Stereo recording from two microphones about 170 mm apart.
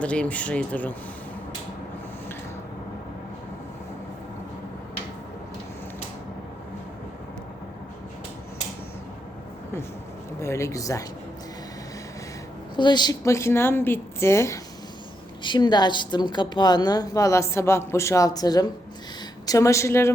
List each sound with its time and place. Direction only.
0.0 s a woman's voice: 5° left (ahead or behind)
10.4 s a woman's voice: 15° left (ahead or behind)
12.7 s a woman's voice: 25° left (ahead or behind)